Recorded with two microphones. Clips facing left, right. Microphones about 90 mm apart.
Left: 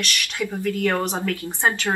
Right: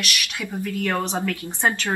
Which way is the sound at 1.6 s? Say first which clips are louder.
Left 1 dB; 20° left (ahead or behind).